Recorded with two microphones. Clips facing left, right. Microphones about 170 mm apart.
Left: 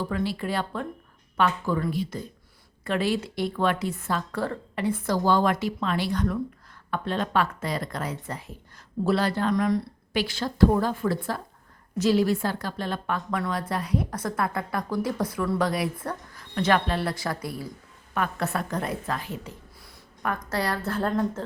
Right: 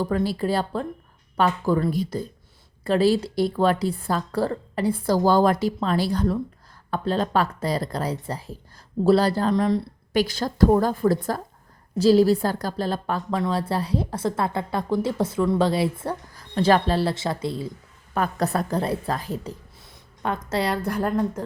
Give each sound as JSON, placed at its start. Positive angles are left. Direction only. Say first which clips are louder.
{"t": 0.0, "sound": "a woman's voice", "louder": "right 5 dB", "side_deg": -40}
{"t": 10.1, "sound": "a woman's voice", "louder": "right 5 dB", "side_deg": -40}
{"t": 18.1, "sound": "a woman's voice", "louder": "right 4 dB", "side_deg": -35}
{"t": 19.8, "sound": "speech", "louder": "right 2 dB", "side_deg": -25}